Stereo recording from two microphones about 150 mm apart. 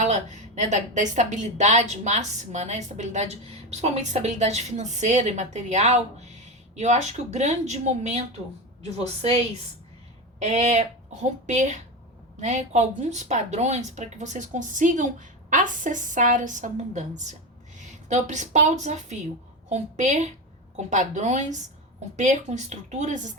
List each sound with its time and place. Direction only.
0.0 s a woman's voice: 50° right (ahead or behind)
10.4 s a woman's voice: 50° right (ahead or behind)